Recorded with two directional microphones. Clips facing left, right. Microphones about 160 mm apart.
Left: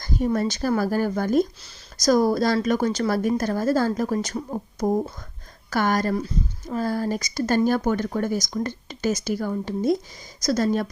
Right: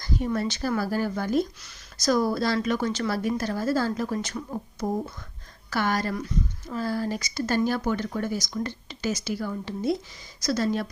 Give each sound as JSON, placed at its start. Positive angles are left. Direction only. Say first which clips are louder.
{"t": 0.0, "sound": "speech", "louder": "left 4 dB", "side_deg": 40}
{"t": 6.1, "sound": "speech", "louder": "left 3 dB", "side_deg": 30}
{"t": 6.7, "sound": "speech", "louder": "left 3 dB", "side_deg": 45}